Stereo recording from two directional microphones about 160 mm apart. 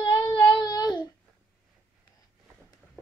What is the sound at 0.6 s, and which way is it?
Child singing, 25° left (ahead or behind).